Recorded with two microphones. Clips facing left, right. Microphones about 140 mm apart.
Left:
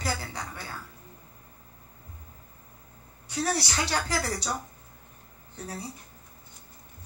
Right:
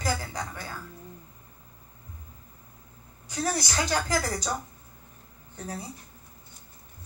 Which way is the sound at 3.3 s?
45° right (ahead or behind).